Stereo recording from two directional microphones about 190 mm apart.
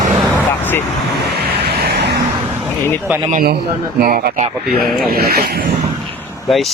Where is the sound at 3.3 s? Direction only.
50° right (ahead or behind).